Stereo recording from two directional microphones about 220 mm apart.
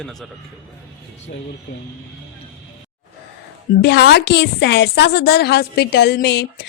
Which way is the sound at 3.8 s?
50° left (ahead or behind).